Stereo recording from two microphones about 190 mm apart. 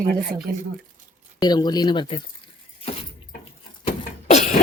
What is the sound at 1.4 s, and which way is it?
Speech, 20° left (ahead or behind).